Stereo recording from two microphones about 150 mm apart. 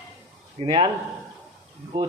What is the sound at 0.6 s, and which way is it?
Speech, 35° right (ahead or behind).